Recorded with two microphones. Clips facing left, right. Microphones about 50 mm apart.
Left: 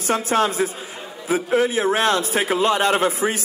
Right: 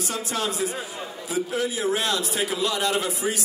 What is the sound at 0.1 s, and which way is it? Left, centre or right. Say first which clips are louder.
Speech: left 11 dB; left.